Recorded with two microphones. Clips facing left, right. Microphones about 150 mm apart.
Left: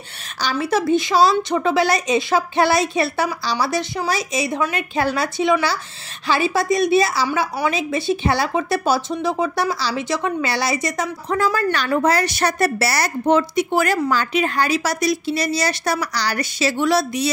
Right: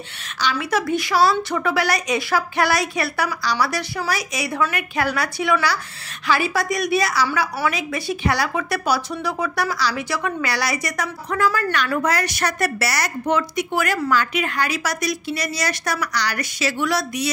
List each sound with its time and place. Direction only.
0.4 s a woman's voice: 35° left (ahead or behind)